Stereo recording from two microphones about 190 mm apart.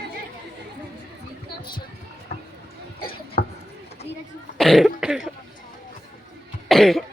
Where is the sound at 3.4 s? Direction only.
50° left (ahead or behind).